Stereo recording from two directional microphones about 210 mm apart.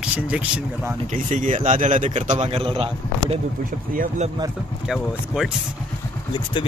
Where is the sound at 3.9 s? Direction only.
40° right (ahead or behind).